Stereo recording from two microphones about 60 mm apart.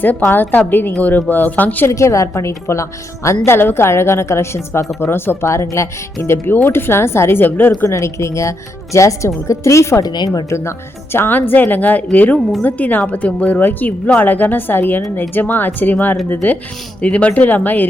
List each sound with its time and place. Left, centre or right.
0.0 s a woman's voice: left
1.9 s a woman's voice: left
3.2 s speech: left
5.5 s speech: left
7.4 s speech: left
7.9 s a woman's voice: left
10.0 s a woman's voice: left
10.5 s a woman's voice: left